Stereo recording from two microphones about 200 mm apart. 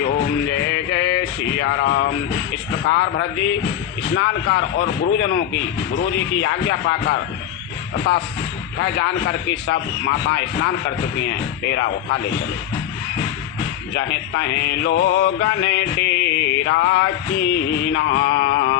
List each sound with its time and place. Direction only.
1.2 s speech: 60° left (ahead or behind)
2.5 s music: 60° left (ahead or behind)
8.8 s music: 60° left (ahead or behind)
13.9 s music: 60° left (ahead or behind)